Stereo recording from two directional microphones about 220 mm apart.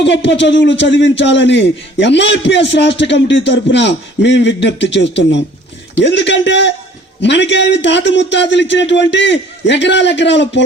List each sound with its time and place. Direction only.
0.0 s a man's voice: 55° left (ahead or behind)